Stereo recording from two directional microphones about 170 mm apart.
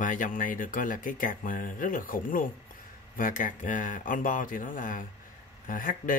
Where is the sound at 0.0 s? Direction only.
50° left (ahead or behind).